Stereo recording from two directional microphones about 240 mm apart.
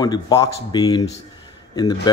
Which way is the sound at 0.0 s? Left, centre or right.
Centre.